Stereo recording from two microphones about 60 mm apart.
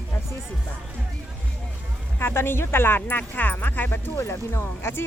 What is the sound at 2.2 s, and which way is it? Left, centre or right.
Speech, left.